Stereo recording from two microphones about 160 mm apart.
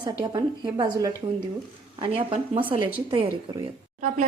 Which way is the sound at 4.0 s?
50° right (ahead or behind).